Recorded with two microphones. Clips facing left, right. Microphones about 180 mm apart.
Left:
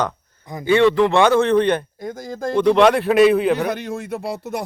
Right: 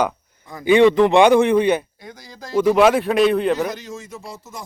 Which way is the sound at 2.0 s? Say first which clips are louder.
Left 12 dB; 50° left (ahead or behind).